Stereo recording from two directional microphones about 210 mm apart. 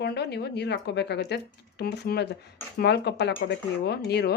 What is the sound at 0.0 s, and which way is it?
Speech, 50° left (ahead or behind).